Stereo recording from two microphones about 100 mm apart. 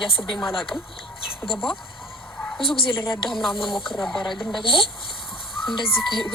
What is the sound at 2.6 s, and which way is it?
Speech, 65° left (ahead or behind).